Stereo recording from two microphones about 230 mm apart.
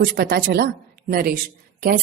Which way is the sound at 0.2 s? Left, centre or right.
Right.